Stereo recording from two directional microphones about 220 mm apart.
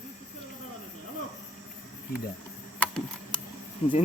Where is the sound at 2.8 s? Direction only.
5° left (ahead or behind).